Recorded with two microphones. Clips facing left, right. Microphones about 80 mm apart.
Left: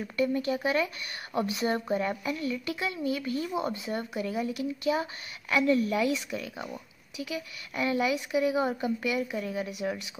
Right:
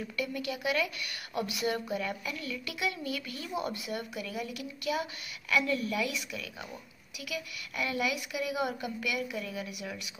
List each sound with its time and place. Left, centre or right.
0.2 s speech: left